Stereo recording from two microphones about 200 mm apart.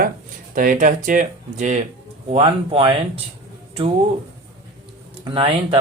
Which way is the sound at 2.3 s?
30° right (ahead or behind).